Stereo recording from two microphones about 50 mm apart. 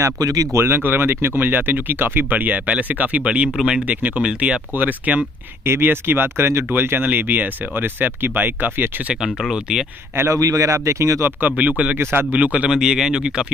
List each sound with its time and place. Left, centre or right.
0.0 s speech: right
0.7 s speech: right
4.7 s speech: right
5.7 s speech: right
6.7 s speech: right
9.1 s speech: centre
10.1 s speech: right
11.4 s speech: right
12.0 s speech: right
12.3 s speech: right
12.6 s speech: centre